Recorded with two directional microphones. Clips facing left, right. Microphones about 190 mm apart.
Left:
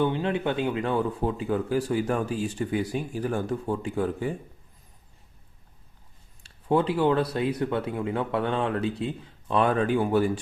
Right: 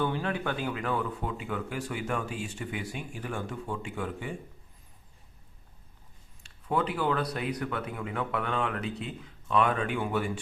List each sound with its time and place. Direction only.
0.0 s speech: 20° left (ahead or behind); by 4.4 s 40° left (ahead or behind)
6.4 s speech: 30° left (ahead or behind)